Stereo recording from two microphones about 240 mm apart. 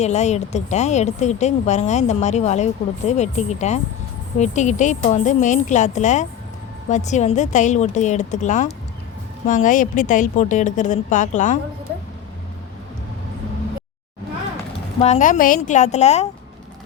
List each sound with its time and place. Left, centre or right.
0.0 s a woman's voice: left
15.0 s speech: left